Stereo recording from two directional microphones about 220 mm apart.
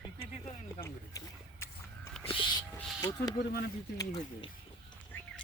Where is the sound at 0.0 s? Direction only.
25° left (ahead or behind).